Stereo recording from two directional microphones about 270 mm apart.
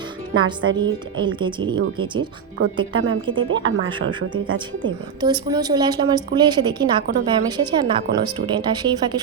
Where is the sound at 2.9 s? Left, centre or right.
Right.